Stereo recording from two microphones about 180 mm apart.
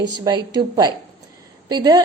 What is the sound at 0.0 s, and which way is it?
A woman's voice, 25° right (ahead or behind).